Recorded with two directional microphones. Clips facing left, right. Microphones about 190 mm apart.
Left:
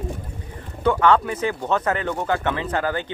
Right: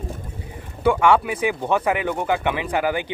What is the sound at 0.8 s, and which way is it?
Speech, 10° right (ahead or behind).